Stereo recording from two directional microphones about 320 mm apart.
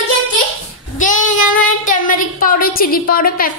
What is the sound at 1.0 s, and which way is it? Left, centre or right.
Speech, left.